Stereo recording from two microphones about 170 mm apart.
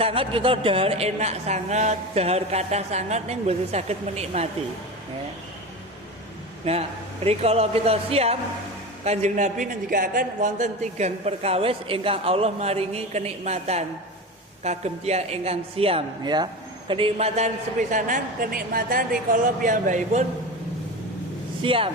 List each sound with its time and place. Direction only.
0.0 s a man's voice: 35° right (ahead or behind)
6.7 s a man's voice: 35° right (ahead or behind)
16.9 s a man's voice: 35° right (ahead or behind)
17.9 s a woman's voice: 55° right (ahead or behind)
21.6 s speech: 30° right (ahead or behind)